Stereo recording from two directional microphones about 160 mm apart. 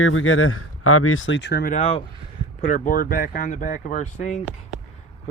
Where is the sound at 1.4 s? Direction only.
80° left.